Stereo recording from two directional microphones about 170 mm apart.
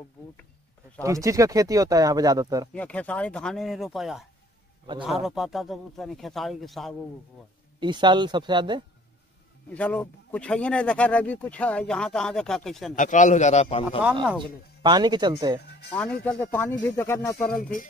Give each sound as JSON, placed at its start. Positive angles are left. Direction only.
{"t": 1.0, "sound": "speech", "side_deg": -20}
{"t": 2.7, "sound": "speech", "side_deg": 10}
{"t": 7.8, "sound": "speech", "side_deg": -25}
{"t": 9.7, "sound": "speech", "side_deg": 10}
{"t": 12.9, "sound": "a man's voice", "side_deg": 45}
{"t": 14.8, "sound": "speech", "side_deg": -25}
{"t": 16.8, "sound": "speech", "side_deg": 15}
{"t": 17.6, "sound": "a man's voice", "side_deg": 50}